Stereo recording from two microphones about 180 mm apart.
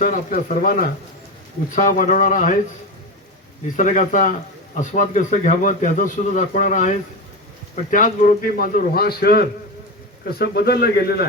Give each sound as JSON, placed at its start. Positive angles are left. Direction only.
{"t": 0.0, "sound": "a man's voice", "side_deg": 45}
{"t": 3.8, "sound": "a man's voice", "side_deg": 45}